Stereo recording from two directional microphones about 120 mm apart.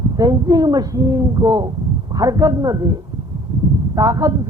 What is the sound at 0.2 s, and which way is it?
Speech, 30° right (ahead or behind).